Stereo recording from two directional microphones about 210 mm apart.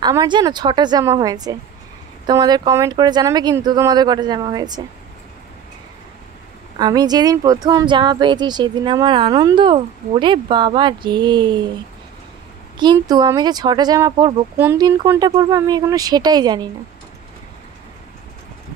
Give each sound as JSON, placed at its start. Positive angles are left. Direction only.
{"t": 0.0, "sound": "speech", "side_deg": -20}
{"t": 6.8, "sound": "speech", "side_deg": -20}
{"t": 12.7, "sound": "speech", "side_deg": -20}